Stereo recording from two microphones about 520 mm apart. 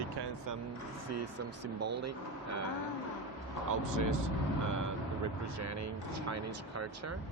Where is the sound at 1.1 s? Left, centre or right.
Right.